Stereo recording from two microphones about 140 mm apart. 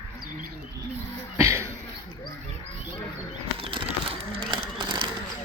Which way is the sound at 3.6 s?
40° right (ahead or behind).